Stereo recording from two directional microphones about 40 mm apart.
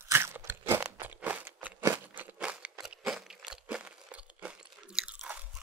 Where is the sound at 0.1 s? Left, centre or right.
Right.